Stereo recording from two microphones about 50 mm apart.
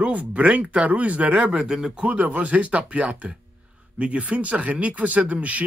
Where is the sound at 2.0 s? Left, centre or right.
Right.